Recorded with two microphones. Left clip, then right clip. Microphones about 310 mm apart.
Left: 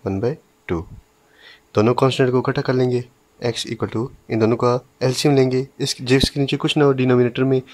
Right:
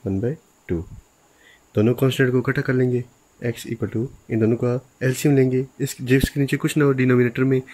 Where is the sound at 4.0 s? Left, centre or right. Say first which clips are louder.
Left 1 dB; left.